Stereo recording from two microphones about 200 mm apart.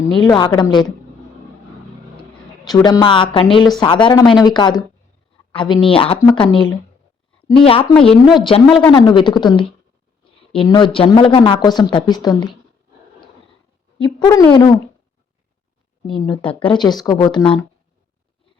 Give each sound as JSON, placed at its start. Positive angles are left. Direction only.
{"t": 0.0, "sound": "a woman's voice", "side_deg": 20}
{"t": 2.6, "sound": "a woman's voice", "side_deg": 15}
{"t": 14.0, "sound": "a woman's voice", "side_deg": 20}
{"t": 16.0, "sound": "a woman's voice", "side_deg": 20}